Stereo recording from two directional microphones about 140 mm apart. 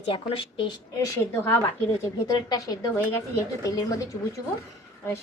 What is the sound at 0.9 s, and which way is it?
A woman's voice, 20° left (ahead or behind).